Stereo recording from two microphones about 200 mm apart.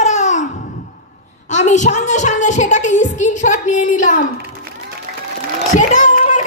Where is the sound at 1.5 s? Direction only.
35° left (ahead or behind).